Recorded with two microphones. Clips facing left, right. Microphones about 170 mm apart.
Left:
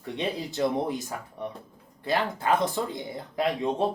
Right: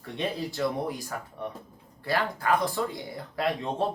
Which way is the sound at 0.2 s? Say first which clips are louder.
Left 1 dB; 20° left (ahead or behind).